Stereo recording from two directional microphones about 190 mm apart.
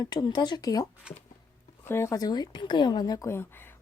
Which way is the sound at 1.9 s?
15° left (ahead or behind).